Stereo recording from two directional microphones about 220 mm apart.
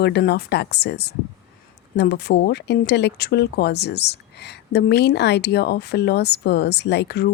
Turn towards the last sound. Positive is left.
turn(degrees=50)  # may be behind; listen again after turning